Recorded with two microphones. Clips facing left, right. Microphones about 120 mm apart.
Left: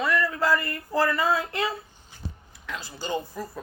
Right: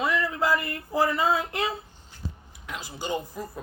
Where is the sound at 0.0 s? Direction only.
20° right (ahead or behind).